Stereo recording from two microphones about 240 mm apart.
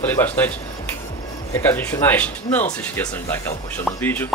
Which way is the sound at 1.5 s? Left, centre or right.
Centre.